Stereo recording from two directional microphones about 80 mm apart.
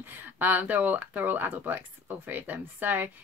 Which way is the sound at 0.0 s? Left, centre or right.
Right.